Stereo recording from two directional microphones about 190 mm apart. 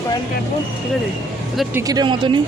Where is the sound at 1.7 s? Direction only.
20° right (ahead or behind).